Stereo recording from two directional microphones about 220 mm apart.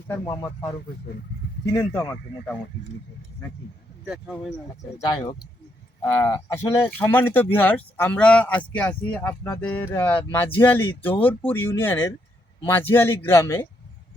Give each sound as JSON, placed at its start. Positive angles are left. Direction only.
{"t": 0.1, "sound": "speech", "side_deg": 15}
{"t": 1.7, "sound": "speech", "side_deg": 15}
{"t": 4.0, "sound": "speech", "side_deg": 0}
{"t": 5.0, "sound": "speech", "side_deg": 15}